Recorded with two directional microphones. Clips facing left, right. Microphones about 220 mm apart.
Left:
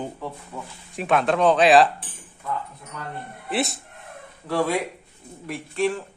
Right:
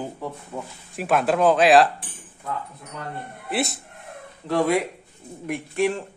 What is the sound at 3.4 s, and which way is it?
Speech, centre (ahead or behind).